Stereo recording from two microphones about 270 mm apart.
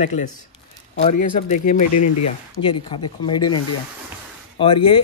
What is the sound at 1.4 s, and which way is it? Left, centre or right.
Speech, left.